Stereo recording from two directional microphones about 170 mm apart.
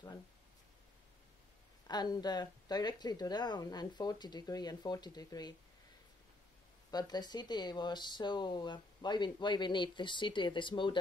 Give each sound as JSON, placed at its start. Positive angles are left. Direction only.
{"t": 1.9, "sound": "speech", "side_deg": 25}
{"t": 6.9, "sound": "speech", "side_deg": 25}